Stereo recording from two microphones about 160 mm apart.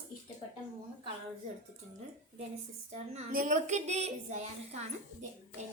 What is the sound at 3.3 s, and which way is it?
A woman's voice, 55° right (ahead or behind).